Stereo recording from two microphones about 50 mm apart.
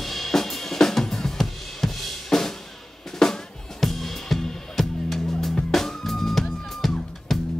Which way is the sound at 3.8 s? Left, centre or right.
Centre.